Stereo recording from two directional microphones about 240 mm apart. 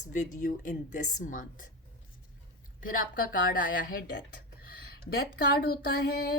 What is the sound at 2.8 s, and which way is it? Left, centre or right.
Speech, left.